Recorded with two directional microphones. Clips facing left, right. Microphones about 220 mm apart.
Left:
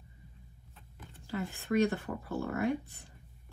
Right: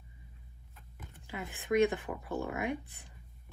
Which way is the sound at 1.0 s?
15° right (ahead or behind).